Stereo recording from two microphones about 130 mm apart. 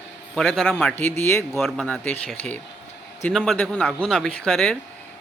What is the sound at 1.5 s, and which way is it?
Speech, centre (ahead or behind).